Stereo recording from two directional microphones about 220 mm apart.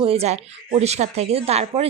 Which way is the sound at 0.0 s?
25° right (ahead or behind).